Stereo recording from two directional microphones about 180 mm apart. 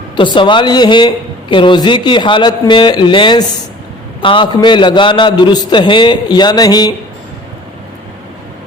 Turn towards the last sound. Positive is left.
turn(degrees=20)  # may be behind; listen again after turning